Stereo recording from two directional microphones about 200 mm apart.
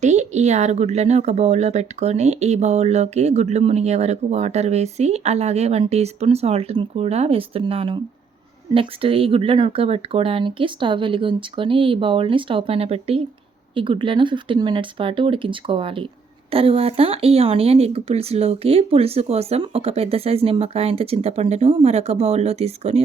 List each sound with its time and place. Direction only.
0.0 s speech: 35° right (ahead or behind)